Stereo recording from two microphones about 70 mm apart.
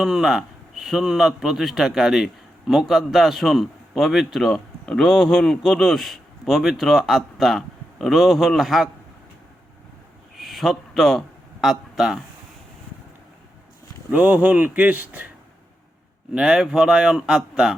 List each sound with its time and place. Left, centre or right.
0.0 s a man's voice: centre
10.3 s a sound: centre
11.6 s speech: centre
14.1 s speech: right
16.3 s speech: centre